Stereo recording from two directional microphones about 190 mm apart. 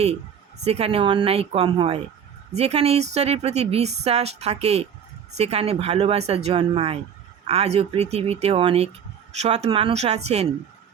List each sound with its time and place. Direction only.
0.6 s speech: 35° right (ahead or behind)